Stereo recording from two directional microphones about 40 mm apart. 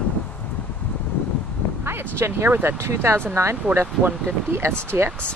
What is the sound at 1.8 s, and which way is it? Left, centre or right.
Speech, right.